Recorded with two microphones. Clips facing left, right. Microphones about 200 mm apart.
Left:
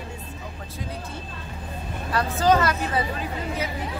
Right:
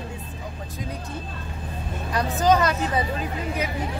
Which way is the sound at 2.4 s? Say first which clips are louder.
Even; 15° right (ahead or behind).